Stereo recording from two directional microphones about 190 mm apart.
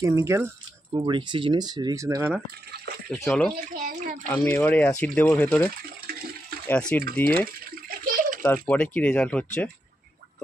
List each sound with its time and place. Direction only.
0.0 s speech: 15° right (ahead or behind)
0.9 s speech: 25° right (ahead or behind)
3.1 s speech: 5° left (ahead or behind)
3.5 s a child's voice: 45° right (ahead or behind)
4.3 s speech: 10° left (ahead or behind)
6.7 s speech: 5° left (ahead or behind)
7.4 s water: 50° right (ahead or behind)
8.6 s speech: 5° left (ahead or behind)